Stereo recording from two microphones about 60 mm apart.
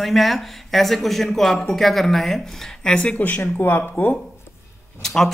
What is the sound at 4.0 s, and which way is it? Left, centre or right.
Speech, left.